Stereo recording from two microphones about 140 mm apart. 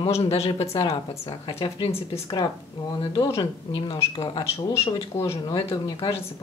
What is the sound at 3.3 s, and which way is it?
Speech, 40° left (ahead or behind).